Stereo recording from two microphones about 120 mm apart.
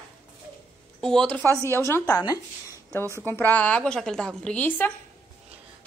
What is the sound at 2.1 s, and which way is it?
Speech, 30° left (ahead or behind).